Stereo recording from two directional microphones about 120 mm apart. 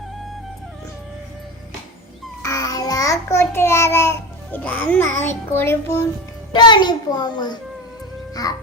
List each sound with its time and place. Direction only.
2.4 s child singing: 30° left (ahead or behind)
4.6 s a child's voice: 10° left (ahead or behind)
5.5 s music: 20° left (ahead or behind)
6.5 s a child's voice: 40° left (ahead or behind)